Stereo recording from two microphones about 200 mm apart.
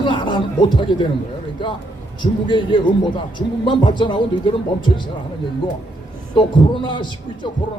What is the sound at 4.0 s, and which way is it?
A man's voice, 25° left (ahead or behind).